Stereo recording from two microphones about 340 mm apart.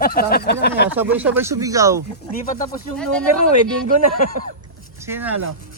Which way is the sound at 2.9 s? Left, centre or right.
Centre.